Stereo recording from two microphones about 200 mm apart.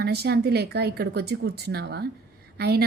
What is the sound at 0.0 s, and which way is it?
A woman's voice, 55° right (ahead or behind).